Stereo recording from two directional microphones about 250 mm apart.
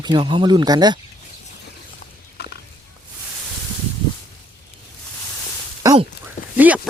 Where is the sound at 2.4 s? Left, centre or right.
Left.